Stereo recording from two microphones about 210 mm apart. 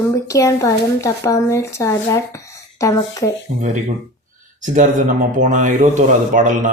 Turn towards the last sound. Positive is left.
turn(degrees=-40)  # may be behind; listen again after turning